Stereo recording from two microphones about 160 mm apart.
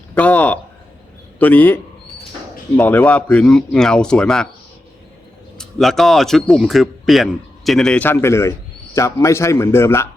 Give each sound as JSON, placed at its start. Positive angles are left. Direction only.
{"t": 0.1, "sound": "a man's voice", "side_deg": 10}
{"t": 5.5, "sound": "a man's voice", "side_deg": 0}